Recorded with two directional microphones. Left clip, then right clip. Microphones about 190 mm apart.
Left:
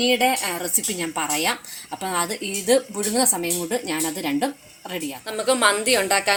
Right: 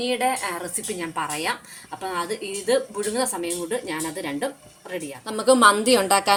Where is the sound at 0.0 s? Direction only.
50° left (ahead or behind).